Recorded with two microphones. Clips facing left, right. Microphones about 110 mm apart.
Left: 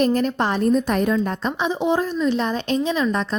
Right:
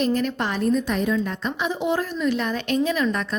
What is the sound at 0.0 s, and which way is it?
A woman's voice, 40° left (ahead or behind).